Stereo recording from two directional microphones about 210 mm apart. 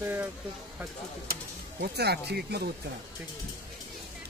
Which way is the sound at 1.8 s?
50° right (ahead or behind).